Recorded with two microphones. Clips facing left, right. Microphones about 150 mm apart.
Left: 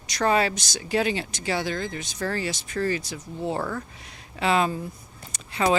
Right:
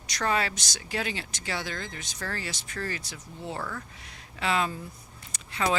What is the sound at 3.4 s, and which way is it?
Speech, 35° left (ahead or behind).